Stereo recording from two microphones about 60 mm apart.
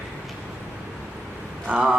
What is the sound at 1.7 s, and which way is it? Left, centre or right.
Speech, right.